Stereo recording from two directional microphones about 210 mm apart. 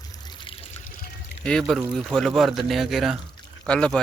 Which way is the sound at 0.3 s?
25° left (ahead or behind).